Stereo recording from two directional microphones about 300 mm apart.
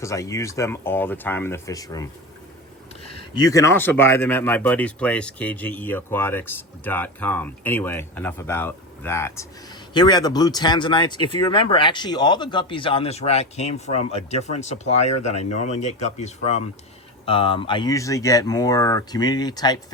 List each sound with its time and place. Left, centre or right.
0.0 s speech: centre
3.3 s speech: centre